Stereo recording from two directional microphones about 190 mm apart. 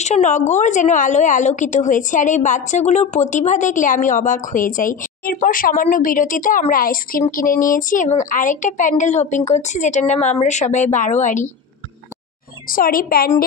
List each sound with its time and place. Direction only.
0.0 s a woman's voice: 40° left (ahead or behind)
12.6 s a woman's voice: 50° left (ahead or behind)